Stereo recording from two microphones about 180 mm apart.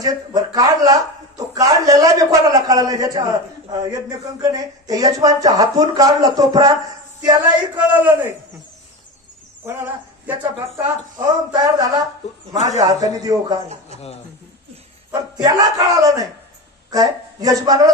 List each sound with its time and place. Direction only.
0.0 s speech: 20° right (ahead or behind)
7.7 s a man's voice: 10° right (ahead or behind)
10.2 s a man's voice: 10° right (ahead or behind)
11.1 s speech: 20° right (ahead or behind)
15.3 s speech: 20° right (ahead or behind)